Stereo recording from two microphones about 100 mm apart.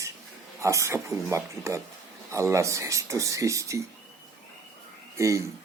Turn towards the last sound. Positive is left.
turn(degrees=-30)  # may be behind; listen again after turning